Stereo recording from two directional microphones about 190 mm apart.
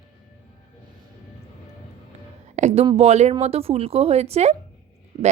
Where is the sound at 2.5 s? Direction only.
35° right (ahead or behind).